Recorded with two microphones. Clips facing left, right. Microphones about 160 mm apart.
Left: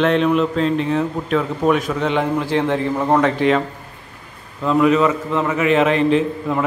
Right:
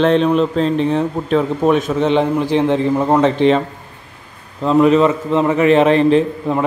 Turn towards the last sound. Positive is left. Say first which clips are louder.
# right 3 dB
turn(degrees=-35)  # may be behind; listen again after turning